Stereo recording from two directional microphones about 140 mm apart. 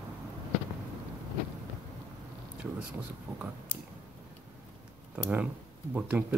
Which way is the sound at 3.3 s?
20° right (ahead or behind).